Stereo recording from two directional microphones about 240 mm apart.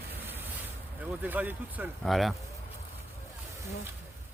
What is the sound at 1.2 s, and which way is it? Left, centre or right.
Speech, centre.